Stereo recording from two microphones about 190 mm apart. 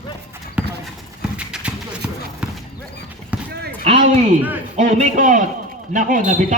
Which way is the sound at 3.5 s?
60° right (ahead or behind).